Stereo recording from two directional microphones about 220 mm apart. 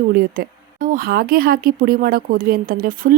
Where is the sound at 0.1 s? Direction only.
40° right (ahead or behind).